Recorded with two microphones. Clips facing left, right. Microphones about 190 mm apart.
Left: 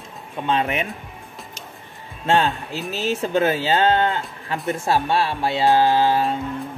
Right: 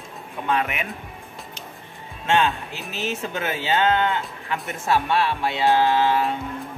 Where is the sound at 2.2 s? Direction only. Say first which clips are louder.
Left 2 dB; 35° left (ahead or behind).